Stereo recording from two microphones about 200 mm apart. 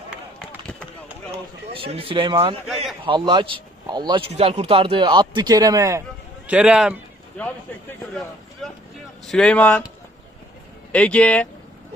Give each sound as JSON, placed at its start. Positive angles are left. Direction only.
{"t": 0.1, "sound": "chop", "side_deg": 0}
{"t": 1.7, "sound": "a man's voice", "side_deg": -30}
{"t": 6.5, "sound": "speech", "side_deg": -5}
{"t": 7.4, "sound": "speech", "side_deg": 5}
{"t": 8.6, "sound": "vehicle", "side_deg": 0}
{"t": 9.2, "sound": "speech", "side_deg": 5}
{"t": 10.9, "sound": "speech", "side_deg": 5}